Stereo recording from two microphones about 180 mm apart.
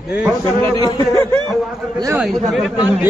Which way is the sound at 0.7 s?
20° left (ahead or behind).